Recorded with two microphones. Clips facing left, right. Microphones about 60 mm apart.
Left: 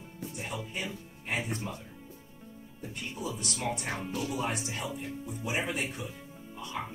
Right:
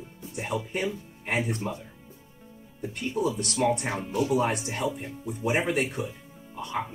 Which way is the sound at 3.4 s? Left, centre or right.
Right.